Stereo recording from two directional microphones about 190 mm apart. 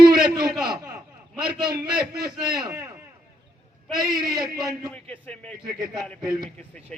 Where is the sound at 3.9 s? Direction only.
20° right (ahead or behind).